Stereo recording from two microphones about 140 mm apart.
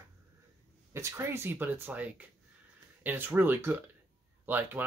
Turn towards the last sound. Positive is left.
turn(degrees=-15)  # may be behind; listen again after turning